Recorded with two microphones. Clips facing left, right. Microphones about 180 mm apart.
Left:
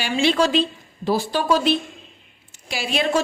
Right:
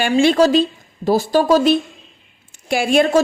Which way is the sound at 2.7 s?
50° right (ahead or behind).